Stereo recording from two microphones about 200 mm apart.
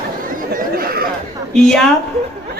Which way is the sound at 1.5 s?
Centre (ahead or behind).